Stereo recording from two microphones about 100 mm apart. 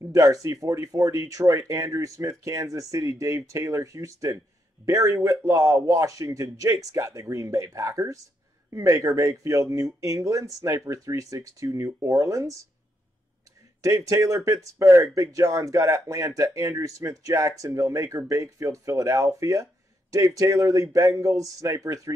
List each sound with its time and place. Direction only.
0.1 s speech: 35° right (ahead or behind)
13.7 s speech: 35° right (ahead or behind)